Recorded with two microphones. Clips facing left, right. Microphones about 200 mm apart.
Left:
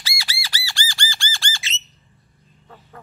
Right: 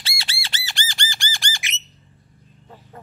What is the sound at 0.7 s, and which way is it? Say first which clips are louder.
Squawk: even; 20° right (ahead or behind).